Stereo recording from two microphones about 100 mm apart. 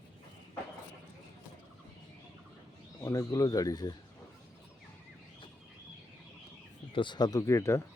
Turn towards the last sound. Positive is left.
turn(degrees=30)  # may be behind; listen again after turning